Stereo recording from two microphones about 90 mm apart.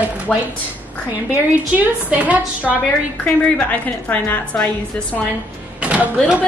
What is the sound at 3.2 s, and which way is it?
A woman's voice, 15° left (ahead or behind).